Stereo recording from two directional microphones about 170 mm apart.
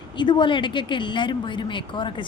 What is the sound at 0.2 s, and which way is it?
A woman's voice, 30° left (ahead or behind).